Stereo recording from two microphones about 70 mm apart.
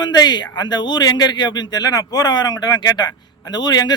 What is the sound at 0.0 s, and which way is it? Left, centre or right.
Speech, left.